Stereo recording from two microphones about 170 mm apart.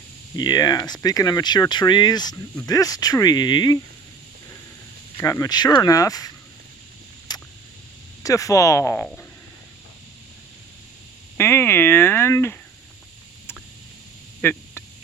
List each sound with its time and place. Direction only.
0.3 s speech: 25° left (ahead or behind)
5.2 s speech: 20° left (ahead or behind)
7.3 s a sound: 25° left (ahead or behind)
8.2 s speech: 20° left (ahead or behind)
11.3 s speech: 15° left (ahead or behind)
14.4 s speech: 10° left (ahead or behind)